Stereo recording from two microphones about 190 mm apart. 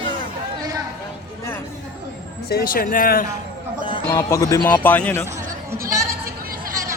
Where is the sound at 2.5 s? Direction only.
50° left (ahead or behind).